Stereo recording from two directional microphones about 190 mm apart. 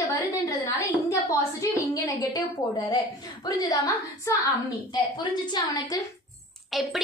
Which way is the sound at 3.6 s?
20° left (ahead or behind).